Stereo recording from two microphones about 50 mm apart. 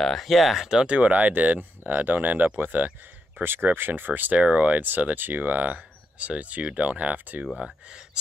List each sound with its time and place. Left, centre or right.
0.0 s speech: centre
0.7 s speech: centre
0.9 s speech: right
4.4 s speech: right
4.8 s speech: right